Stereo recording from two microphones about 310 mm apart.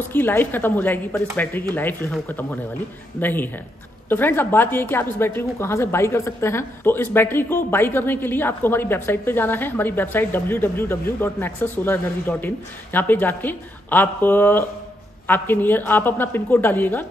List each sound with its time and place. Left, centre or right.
0.1 s speech: centre